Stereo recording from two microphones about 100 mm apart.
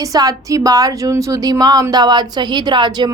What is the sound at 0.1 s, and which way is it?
A woman's voice, 40° right (ahead or behind).